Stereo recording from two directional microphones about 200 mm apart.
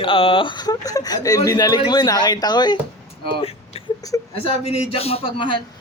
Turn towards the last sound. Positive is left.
turn(degrees=30)  # may be behind; listen again after turning